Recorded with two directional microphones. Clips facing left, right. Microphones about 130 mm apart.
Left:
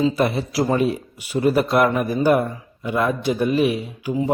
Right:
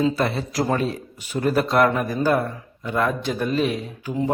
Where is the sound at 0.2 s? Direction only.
15° left (ahead or behind).